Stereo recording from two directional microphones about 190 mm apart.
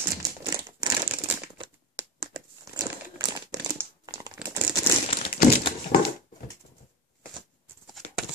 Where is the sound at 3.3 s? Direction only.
20° right (ahead or behind).